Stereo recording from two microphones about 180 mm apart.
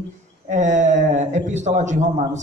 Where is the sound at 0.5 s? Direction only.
45° right (ahead or behind).